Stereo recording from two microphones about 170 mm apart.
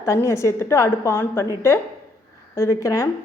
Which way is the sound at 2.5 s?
20° left (ahead or behind).